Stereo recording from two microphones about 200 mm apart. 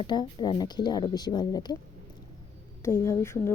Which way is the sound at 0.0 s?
20° left (ahead or behind).